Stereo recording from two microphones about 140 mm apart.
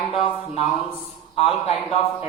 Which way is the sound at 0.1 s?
45° left (ahead or behind).